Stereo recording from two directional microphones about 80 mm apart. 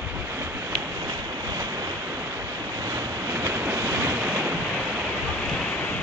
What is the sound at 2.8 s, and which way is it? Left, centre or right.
Waves, right.